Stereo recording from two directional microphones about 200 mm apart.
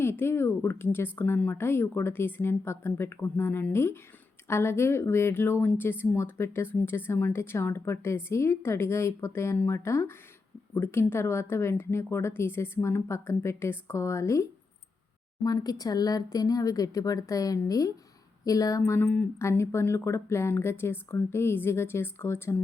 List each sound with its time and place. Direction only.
0.0 s speech: 10° left (ahead or behind)